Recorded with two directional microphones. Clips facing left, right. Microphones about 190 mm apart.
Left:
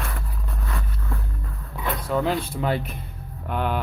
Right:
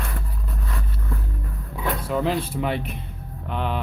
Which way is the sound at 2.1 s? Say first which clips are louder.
Left 1 dB; centre (ahead or behind).